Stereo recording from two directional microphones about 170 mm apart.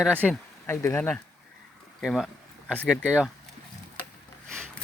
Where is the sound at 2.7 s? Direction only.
Centre (ahead or behind).